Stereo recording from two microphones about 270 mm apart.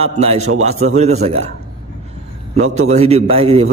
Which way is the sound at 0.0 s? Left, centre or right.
Right.